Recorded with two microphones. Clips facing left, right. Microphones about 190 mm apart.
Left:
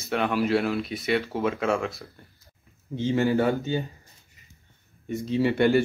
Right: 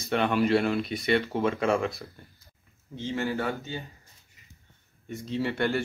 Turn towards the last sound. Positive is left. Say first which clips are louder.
# left 7 dB
turn(degrees=10)  # may be behind; listen again after turning